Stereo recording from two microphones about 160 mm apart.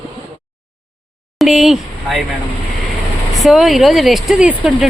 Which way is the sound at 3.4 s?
Centre (ahead or behind).